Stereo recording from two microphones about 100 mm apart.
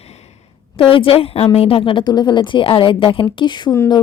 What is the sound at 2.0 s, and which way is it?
A woman's voice, 45° left (ahead or behind).